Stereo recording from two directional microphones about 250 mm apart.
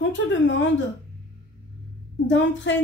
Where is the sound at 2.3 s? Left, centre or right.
Left.